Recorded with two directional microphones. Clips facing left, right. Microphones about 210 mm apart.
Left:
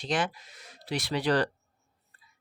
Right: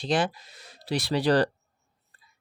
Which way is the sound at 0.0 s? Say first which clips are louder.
Right 4 dB; 35° right (ahead or behind).